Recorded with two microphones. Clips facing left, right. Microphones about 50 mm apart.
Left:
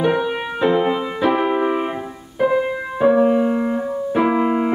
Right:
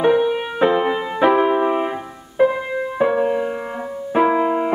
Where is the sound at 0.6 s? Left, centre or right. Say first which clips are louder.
Even; centre.